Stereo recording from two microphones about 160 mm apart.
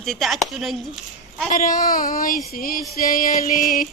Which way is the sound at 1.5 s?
55° left (ahead or behind).